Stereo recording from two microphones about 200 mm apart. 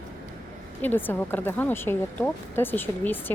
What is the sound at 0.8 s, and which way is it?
A woman's voice, 10° left (ahead or behind).